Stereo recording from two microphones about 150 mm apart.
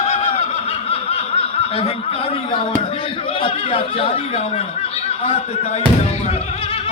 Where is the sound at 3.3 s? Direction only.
35° left (ahead or behind).